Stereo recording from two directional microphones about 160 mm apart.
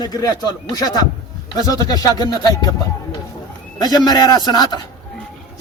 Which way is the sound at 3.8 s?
25° left (ahead or behind).